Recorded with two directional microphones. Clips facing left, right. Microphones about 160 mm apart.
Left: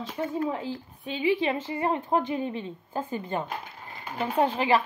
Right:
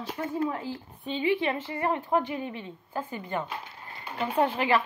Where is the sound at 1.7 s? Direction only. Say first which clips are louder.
Left 1 dB; 20° left (ahead or behind).